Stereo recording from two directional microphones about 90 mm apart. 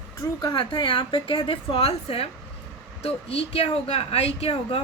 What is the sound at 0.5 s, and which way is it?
A woman's voice, 60° left (ahead or behind).